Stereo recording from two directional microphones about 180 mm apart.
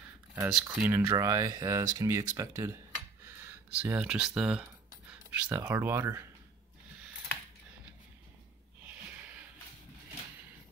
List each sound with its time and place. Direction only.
0.5 s speech: 5° right (ahead or behind)
5.1 s a sound: 10° right (ahead or behind)
5.7 s speech: 10° right (ahead or behind)